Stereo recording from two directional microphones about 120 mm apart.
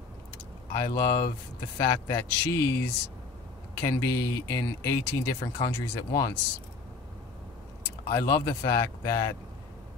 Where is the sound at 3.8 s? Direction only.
30° left (ahead or behind).